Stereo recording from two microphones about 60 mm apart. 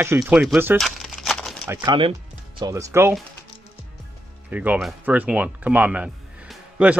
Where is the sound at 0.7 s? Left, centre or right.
Centre.